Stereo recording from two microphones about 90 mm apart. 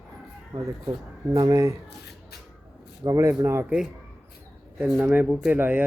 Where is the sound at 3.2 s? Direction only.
30° right (ahead or behind).